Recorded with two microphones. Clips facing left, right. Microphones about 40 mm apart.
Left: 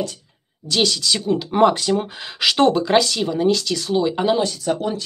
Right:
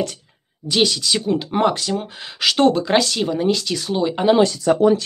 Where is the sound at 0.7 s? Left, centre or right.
Centre.